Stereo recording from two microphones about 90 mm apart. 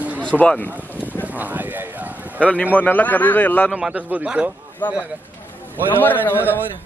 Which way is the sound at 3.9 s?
15° right (ahead or behind).